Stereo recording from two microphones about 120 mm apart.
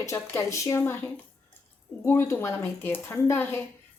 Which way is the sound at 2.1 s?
20° left (ahead or behind).